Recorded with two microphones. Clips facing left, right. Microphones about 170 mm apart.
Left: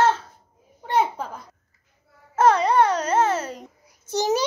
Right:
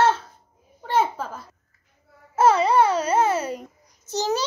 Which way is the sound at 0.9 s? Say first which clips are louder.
Even; 15° left (ahead or behind).